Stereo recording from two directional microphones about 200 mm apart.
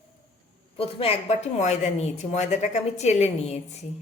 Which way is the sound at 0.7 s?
30° left (ahead or behind).